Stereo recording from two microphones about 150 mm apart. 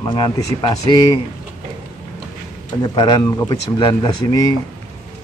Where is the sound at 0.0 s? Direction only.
30° left (ahead or behind).